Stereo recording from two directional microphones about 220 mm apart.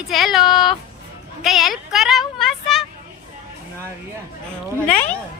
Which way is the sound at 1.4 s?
Centre (ahead or behind).